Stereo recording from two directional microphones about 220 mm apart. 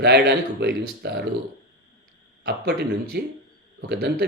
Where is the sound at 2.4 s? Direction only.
50° right (ahead or behind).